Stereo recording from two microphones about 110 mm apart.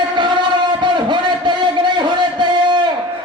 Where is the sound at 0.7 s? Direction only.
45° right (ahead or behind).